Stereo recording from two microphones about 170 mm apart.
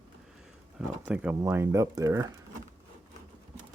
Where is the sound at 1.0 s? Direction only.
10° right (ahead or behind).